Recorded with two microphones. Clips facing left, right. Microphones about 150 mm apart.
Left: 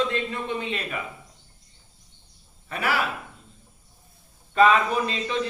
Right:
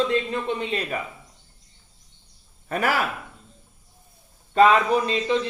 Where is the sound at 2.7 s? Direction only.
45° right (ahead or behind).